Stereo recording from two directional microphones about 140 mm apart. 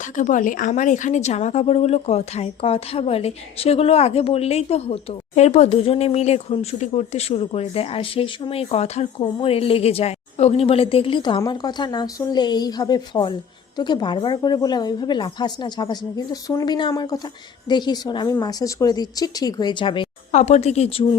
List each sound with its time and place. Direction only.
0.2 s a woman's voice: 65° left (ahead or behind); by 16.6 s 25° left (ahead or behind)
16.6 s a woman's voice: 35° left (ahead or behind)
20.3 s a woman's voice: 55° left (ahead or behind)